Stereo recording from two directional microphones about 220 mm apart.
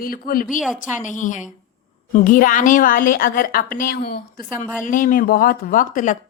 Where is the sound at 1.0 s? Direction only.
35° left (ahead or behind).